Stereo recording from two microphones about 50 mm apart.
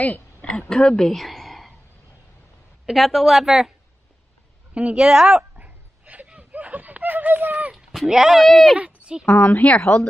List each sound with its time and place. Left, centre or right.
0.0 s a sound: left
0.5 s a woman's voice: centre
2.9 s a woman's voice: centre
4.7 s a woman's voice: right
5.3 s a sound: right
7.7 s speech: centre
8.7 s speech: right
9.3 s speech: left